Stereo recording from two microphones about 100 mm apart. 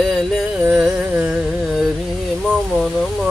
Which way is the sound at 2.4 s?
5° left (ahead or behind).